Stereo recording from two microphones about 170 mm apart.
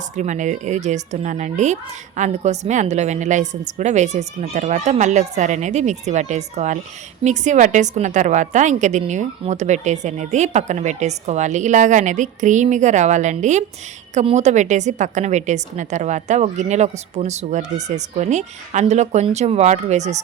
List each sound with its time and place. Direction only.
0.2 s speech: 45° right (ahead or behind)